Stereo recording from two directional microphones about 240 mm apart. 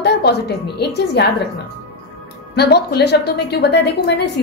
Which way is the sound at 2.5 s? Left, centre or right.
Left.